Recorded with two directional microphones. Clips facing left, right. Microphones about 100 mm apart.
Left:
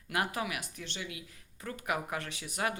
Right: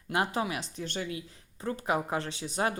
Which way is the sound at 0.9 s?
40° right (ahead or behind).